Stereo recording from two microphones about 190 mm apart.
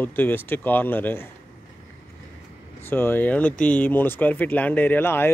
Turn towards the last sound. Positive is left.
turn(degrees=10)  # may be behind; listen again after turning